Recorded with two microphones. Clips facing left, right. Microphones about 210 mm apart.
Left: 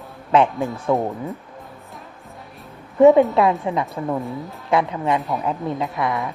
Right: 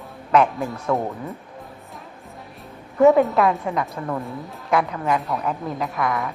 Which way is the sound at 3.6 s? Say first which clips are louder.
Left 2 dB; 15° left (ahead or behind).